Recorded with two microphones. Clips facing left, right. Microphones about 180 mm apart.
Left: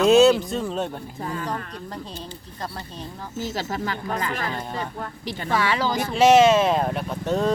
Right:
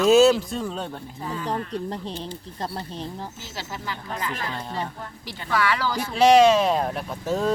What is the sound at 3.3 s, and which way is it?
Speech, 50° left (ahead or behind).